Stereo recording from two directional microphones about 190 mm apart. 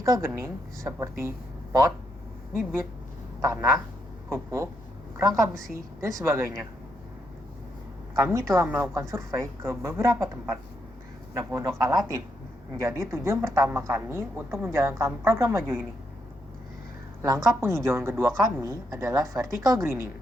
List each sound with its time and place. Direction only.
0.0 s speech: 15° right (ahead or behind)
3.4 s speech: 15° right (ahead or behind)
8.1 s speech: 15° right (ahead or behind)
17.2 s speech: 15° right (ahead or behind)